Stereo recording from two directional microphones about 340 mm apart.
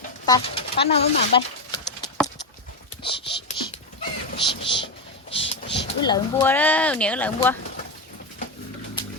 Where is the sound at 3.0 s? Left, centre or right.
Centre.